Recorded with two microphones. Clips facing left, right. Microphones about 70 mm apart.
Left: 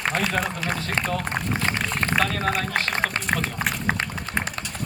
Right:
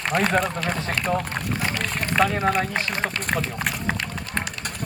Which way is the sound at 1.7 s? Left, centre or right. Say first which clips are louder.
Left 2 dB; left.